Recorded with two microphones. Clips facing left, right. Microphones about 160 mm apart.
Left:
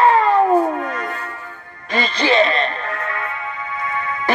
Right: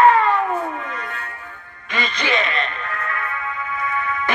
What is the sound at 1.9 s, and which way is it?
Music, 35° left (ahead or behind).